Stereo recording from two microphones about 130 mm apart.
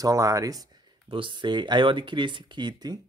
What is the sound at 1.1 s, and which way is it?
Speech, 40° right (ahead or behind).